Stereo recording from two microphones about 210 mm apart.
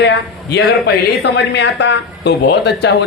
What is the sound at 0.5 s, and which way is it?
A man's voice, 55° left (ahead or behind).